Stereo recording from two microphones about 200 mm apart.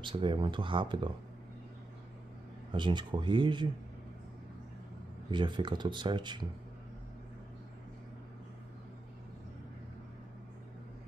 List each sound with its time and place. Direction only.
0.0 s speech: 25° right (ahead or behind)
2.7 s speech: 25° right (ahead or behind)
5.3 s speech: 25° right (ahead or behind)